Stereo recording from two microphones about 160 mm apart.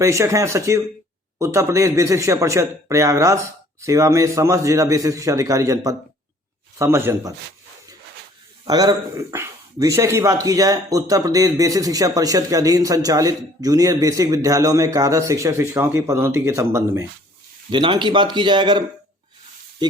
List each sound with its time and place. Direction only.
0.0 s a man's voice: 20° right (ahead or behind)
8.6 s speech: 25° right (ahead or behind)
17.7 s speech: 30° right (ahead or behind)
19.8 s speech: 25° right (ahead or behind)